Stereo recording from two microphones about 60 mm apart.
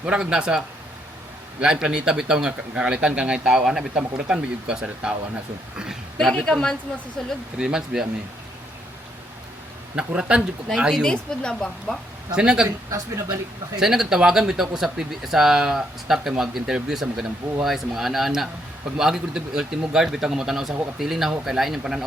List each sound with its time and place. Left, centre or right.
0.0 s speech: centre
6.3 s speech: centre
7.6 s speech: centre
9.9 s speech: centre
11.0 s speech: centre
12.4 s speech: centre
13.7 s speech: centre